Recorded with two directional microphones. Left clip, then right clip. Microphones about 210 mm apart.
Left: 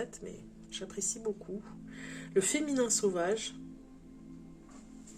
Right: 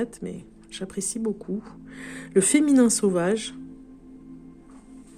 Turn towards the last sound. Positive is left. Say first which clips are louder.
# right 8 dB
turn(degrees=-50)  # may be behind; listen again after turning